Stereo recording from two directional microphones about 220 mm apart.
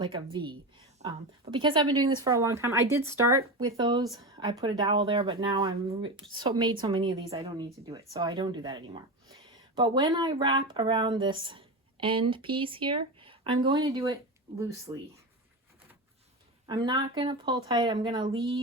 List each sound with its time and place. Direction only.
1.0 s speech: 20° right (ahead or behind)
16.6 s speech: 20° right (ahead or behind)